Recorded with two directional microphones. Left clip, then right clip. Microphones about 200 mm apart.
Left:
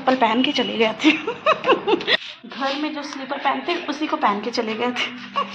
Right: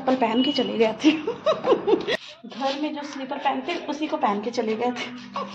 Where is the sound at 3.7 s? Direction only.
30° left (ahead or behind).